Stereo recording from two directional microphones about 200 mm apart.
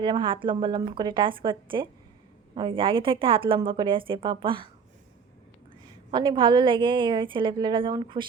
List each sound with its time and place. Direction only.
0.0 s a woman's voice: 25° right (ahead or behind)
6.1 s a woman's voice: 25° right (ahead or behind)